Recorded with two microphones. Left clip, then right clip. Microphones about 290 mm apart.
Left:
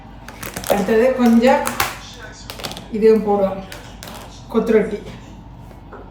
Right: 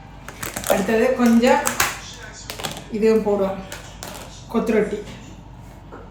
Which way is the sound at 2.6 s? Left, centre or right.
Centre.